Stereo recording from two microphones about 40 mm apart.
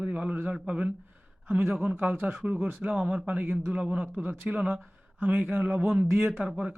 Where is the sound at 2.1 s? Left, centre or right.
Right.